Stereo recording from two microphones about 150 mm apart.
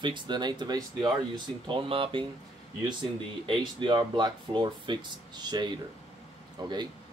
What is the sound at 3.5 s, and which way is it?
Speech, 30° right (ahead or behind).